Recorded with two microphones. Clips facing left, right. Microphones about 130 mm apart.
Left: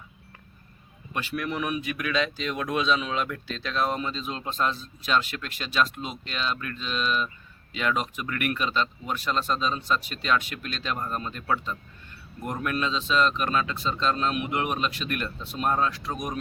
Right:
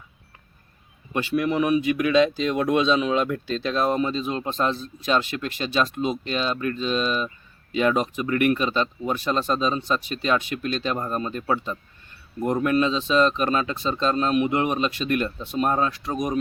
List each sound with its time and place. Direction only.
1.1 s speech: 20° right (ahead or behind)